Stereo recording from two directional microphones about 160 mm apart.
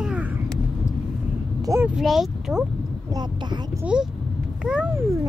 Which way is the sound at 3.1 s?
25° right (ahead or behind).